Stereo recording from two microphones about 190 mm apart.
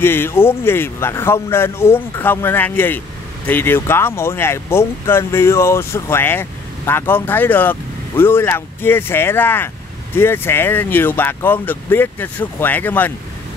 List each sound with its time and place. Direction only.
0.0 s speech: 10° left (ahead or behind)